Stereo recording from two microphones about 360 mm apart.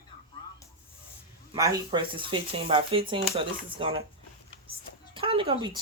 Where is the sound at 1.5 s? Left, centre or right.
Centre.